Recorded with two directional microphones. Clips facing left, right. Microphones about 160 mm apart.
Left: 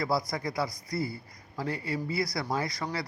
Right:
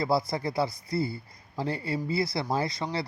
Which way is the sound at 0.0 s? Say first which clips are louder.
Right 3 dB; 25° right (ahead or behind).